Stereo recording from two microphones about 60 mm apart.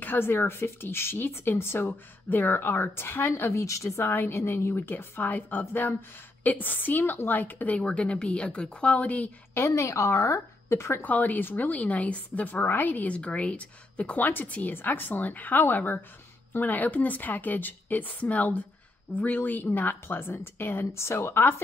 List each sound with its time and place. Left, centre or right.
0.0 s a woman's voice: left
3.6 s a woman's voice: left
4.0 s a woman's voice: left
9.8 s speech: left
11.1 s a woman's voice: left